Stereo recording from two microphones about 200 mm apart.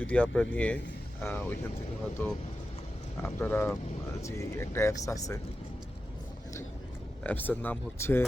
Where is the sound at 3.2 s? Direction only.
10° left (ahead or behind).